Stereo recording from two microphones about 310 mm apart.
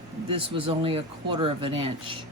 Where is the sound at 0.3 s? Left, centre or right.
Centre.